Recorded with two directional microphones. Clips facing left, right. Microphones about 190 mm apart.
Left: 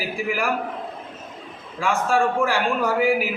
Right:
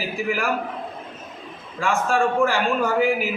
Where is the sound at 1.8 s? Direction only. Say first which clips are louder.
Even; 15° left (ahead or behind).